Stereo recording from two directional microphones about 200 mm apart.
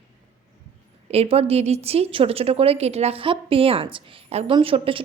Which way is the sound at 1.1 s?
30° right (ahead or behind).